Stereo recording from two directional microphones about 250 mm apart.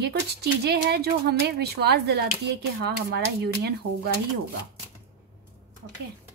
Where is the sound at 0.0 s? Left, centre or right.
Right.